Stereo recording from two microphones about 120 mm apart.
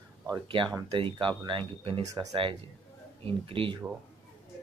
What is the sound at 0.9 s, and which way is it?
Speech, 45° right (ahead or behind).